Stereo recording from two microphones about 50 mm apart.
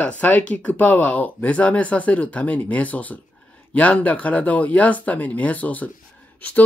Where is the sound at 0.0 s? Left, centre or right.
Left.